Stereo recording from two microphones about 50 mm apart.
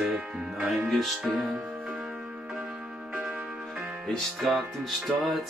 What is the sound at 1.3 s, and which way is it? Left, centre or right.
Music, centre.